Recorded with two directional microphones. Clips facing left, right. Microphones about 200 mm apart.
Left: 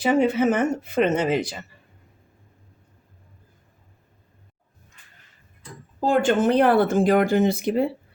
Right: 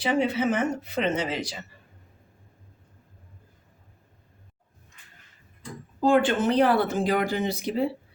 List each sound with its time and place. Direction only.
0.0 s speech: 50° left (ahead or behind)
6.1 s speech: 50° left (ahead or behind)